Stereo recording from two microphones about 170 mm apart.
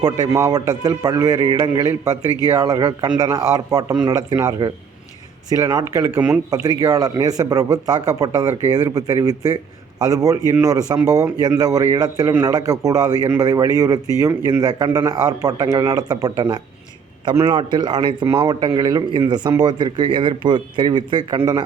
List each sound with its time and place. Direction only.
0.0 s a man's voice: 20° right (ahead or behind)